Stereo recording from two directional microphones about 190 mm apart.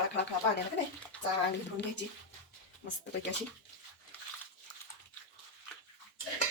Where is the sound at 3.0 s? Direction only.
65° left (ahead or behind).